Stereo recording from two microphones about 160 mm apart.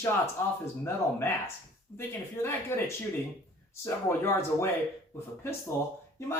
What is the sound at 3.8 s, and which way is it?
Speech, 15° left (ahead or behind).